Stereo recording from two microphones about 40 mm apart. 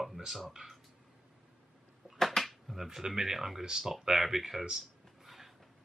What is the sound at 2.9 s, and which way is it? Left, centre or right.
Speech, centre.